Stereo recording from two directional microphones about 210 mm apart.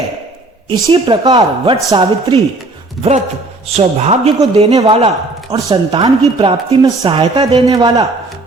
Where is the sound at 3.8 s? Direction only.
30° right (ahead or behind).